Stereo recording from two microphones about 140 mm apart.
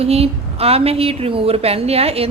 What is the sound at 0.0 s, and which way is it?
A woman's voice, 45° right (ahead or behind).